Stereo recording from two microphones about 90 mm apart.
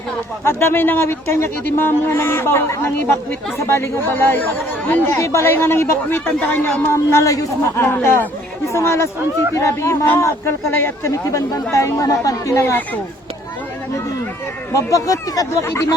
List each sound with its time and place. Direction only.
0.4 s speech: 25° left (ahead or behind)
5.1 s speech: 35° left (ahead or behind)
6.9 s speech: 30° left (ahead or behind)
14.7 s speech: 35° left (ahead or behind)
15.6 s speech: 30° left (ahead or behind)